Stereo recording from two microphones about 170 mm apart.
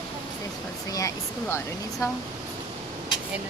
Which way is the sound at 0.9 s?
15° left (ahead or behind).